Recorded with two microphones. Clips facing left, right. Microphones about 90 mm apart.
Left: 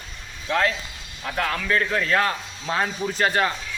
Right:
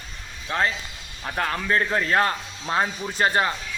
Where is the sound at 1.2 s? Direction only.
25° right (ahead or behind).